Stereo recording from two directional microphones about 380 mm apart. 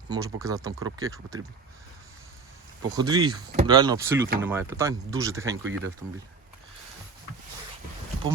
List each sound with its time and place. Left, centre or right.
0.1 s speech: centre
2.9 s speech: centre
5.6 s speech: right